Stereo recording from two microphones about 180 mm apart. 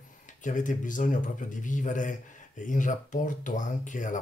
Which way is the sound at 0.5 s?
45° left (ahead or behind).